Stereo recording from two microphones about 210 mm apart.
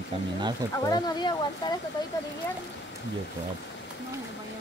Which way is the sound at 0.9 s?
20° left (ahead or behind).